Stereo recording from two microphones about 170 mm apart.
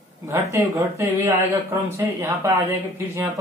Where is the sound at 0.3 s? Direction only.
15° right (ahead or behind).